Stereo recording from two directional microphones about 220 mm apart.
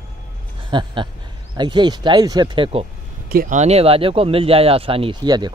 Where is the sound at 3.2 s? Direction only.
40° right (ahead or behind).